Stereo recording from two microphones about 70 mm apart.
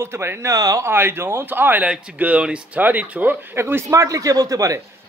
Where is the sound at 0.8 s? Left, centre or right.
Right.